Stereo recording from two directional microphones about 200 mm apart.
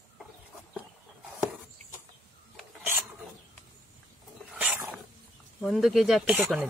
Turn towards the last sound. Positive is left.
turn(degrees=-5)  # may be behind; listen again after turning